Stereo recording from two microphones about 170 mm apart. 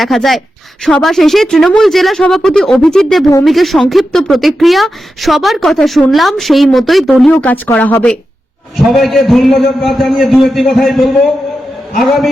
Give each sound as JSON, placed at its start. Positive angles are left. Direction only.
{"t": 0.0, "sound": "speech", "side_deg": 0}